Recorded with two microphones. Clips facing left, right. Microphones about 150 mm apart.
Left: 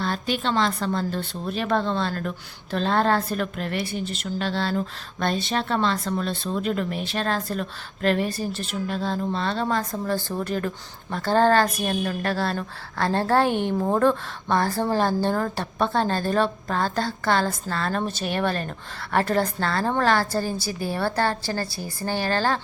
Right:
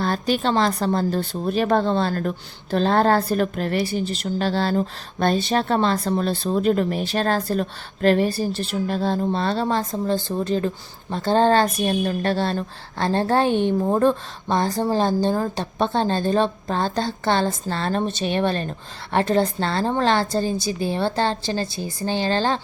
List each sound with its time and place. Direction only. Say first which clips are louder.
0.0 s a woman's voice: right 4 dB; 40° right (ahead or behind); by 22.6 s 20° right (ahead or behind)